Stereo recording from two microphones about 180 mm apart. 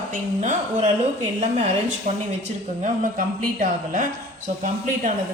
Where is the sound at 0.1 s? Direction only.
45° right (ahead or behind).